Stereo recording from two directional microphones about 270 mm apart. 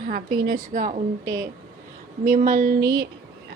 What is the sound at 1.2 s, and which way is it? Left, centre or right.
Speech, centre.